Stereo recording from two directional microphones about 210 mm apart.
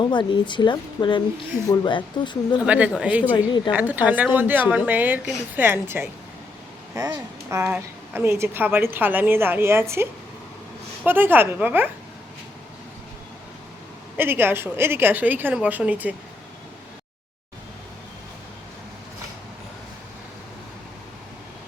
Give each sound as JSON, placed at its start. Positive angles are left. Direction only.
{"t": 0.0, "sound": "speech", "side_deg": 20}
{"t": 2.6, "sound": "a woman's voice", "side_deg": -5}
{"t": 14.2, "sound": "a woman's voice", "side_deg": -10}